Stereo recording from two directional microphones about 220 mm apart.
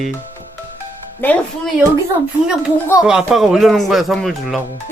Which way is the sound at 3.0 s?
5° right (ahead or behind).